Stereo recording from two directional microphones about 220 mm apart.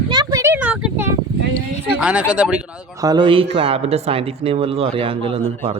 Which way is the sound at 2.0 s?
5° right (ahead or behind).